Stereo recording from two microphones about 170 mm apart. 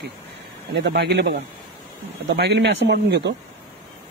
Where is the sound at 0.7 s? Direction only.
85° right.